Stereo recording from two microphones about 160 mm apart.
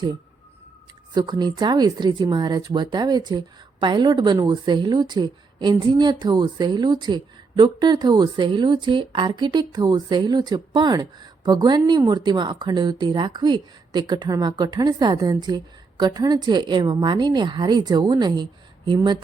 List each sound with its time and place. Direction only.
1.1 s speech: 25° right (ahead or behind)